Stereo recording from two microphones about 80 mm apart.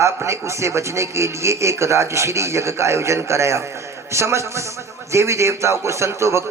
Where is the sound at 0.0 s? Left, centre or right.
Right.